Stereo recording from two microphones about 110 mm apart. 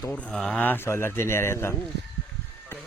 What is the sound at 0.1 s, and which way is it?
Speech, 10° left (ahead or behind).